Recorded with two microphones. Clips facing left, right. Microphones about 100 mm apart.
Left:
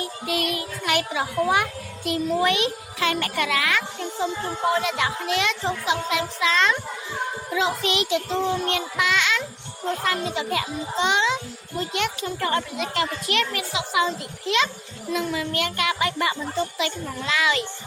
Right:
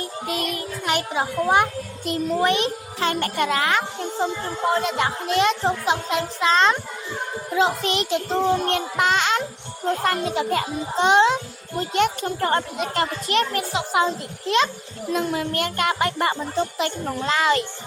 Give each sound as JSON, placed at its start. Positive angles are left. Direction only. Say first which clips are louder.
{"t": 0.0, "sound": "a child's voice", "louder": "even", "side_deg": -35}